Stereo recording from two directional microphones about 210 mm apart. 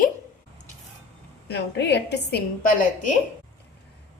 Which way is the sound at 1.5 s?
55° left (ahead or behind).